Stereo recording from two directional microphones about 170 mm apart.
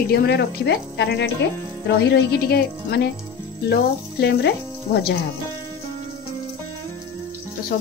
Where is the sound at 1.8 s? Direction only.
75° left (ahead or behind).